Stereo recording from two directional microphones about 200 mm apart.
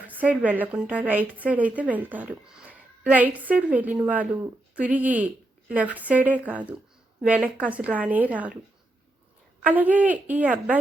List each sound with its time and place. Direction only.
0.1 s a woman's voice: 5° right (ahead or behind)
9.6 s a woman's voice: 10° right (ahead or behind)